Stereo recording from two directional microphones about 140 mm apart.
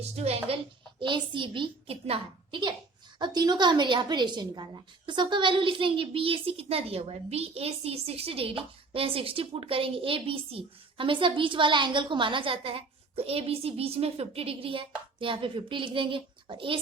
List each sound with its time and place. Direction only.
0.0 s a woman's voice: 50° right (ahead or behind)